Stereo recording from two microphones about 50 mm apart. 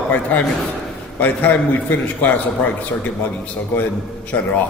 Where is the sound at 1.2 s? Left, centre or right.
Left.